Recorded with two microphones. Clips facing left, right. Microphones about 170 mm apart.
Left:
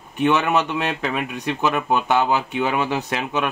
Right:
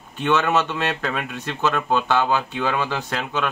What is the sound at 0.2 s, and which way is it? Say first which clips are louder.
Speech: left 1 dB; 15° left (ahead or behind).